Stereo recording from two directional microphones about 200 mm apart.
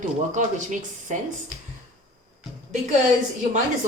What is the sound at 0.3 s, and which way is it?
Speech, 40° right (ahead or behind).